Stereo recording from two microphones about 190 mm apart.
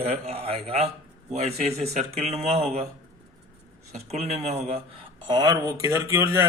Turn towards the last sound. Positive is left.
turn(degrees=-15)  # may be behind; listen again after turning